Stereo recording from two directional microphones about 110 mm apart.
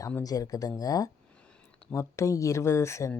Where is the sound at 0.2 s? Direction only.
35° left (ahead or behind).